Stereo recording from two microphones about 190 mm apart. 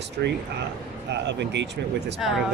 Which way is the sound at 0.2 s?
55° right (ahead or behind).